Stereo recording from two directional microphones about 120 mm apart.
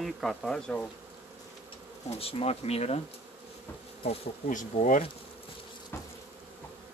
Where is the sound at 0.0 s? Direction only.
Centre (ahead or behind).